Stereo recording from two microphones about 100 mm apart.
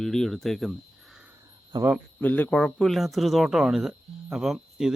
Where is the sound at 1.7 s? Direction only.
45° right (ahead or behind).